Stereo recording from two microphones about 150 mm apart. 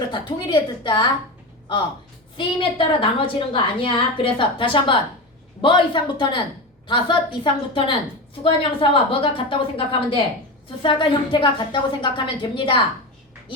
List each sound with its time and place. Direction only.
0.1 s a woman's voice: 35° left (ahead or behind)
2.3 s a woman's voice: 35° left (ahead or behind)
10.8 s a woman's voice: 35° left (ahead or behind)